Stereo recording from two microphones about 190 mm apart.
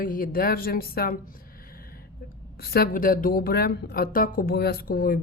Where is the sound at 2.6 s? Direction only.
50° left (ahead or behind).